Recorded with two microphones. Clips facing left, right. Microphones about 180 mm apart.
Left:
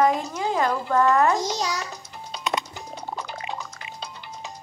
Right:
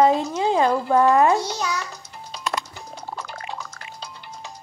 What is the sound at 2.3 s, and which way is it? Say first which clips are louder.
Music: left 1 dB; centre (ahead or behind).